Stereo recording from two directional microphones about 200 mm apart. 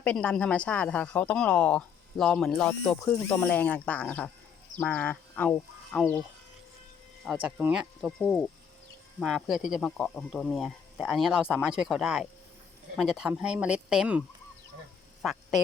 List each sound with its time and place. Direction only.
0.0 s speech: 5° left (ahead or behind)
7.3 s speech: 5° right (ahead or behind)
15.2 s duck: centre (ahead or behind)